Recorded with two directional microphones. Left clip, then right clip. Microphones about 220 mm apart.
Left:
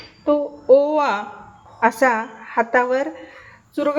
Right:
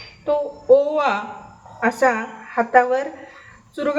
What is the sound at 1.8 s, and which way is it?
Speech, 35° left (ahead or behind).